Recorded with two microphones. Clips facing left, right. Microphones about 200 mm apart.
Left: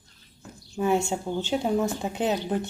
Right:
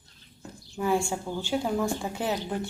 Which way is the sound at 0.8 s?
20° left (ahead or behind).